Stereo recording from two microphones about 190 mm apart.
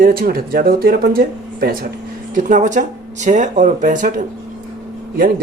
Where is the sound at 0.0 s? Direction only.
50° right (ahead or behind).